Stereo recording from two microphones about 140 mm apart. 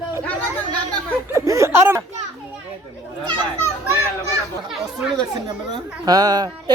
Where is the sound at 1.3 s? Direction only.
20° right (ahead or behind).